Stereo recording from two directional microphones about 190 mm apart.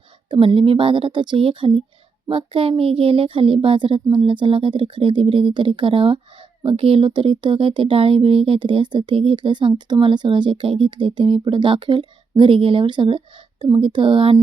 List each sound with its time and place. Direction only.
0.3 s speech: 30° right (ahead or behind)